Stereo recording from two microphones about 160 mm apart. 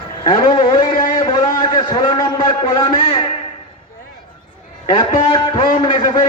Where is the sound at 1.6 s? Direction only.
30° left (ahead or behind).